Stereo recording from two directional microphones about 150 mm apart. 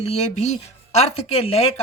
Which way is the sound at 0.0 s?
50° left (ahead or behind).